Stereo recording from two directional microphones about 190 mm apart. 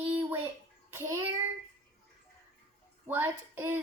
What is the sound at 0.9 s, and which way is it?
Child singing, 15° right (ahead or behind).